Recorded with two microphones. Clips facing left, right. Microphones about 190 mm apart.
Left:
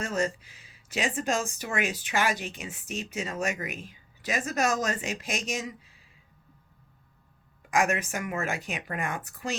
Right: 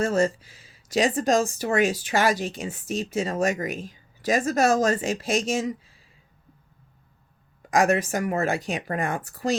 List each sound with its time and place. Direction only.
0.0 s speech: 35° right (ahead or behind)
7.6 s speech: 35° right (ahead or behind)